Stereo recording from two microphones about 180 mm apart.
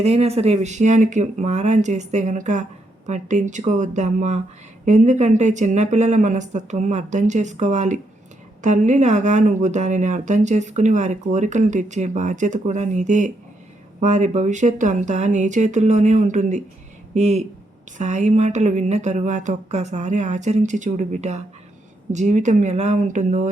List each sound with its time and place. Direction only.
0.0 s speech: 35° right (ahead or behind)